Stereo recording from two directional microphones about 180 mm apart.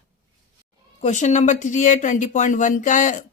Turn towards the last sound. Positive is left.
turn(degrees=45)  # may be behind; listen again after turning